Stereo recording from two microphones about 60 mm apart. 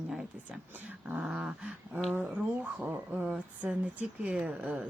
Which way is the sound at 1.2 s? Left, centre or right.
Centre.